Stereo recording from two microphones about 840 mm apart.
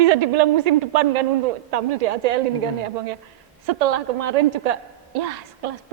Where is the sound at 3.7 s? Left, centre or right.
Right.